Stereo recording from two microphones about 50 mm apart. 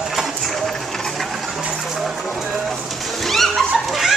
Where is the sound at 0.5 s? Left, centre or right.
Centre.